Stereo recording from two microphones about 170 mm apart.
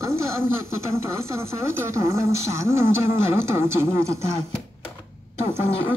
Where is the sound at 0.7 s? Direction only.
15° right (ahead or behind).